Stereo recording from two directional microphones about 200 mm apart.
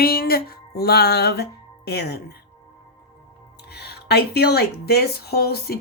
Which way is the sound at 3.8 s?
55° left (ahead or behind).